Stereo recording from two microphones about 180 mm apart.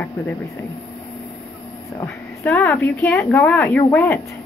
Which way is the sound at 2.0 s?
15° left (ahead or behind).